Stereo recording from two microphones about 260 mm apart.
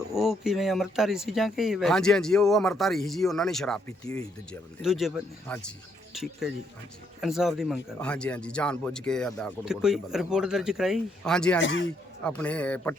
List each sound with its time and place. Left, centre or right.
0.1 s speech: centre
7.2 s speech: centre
11.6 s a man's voice: left
12.2 s speech: centre